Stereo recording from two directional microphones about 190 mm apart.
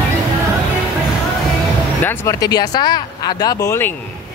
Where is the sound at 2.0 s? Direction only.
15° left (ahead or behind).